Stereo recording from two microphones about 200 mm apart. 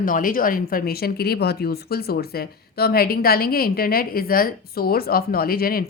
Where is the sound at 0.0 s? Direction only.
45° left (ahead or behind).